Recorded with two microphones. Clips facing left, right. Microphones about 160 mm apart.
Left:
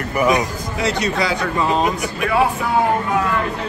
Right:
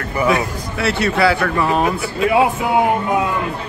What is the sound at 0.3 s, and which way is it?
Speech, 15° left (ahead or behind).